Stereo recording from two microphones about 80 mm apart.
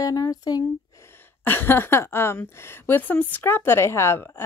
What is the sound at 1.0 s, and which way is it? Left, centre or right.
Speech, left.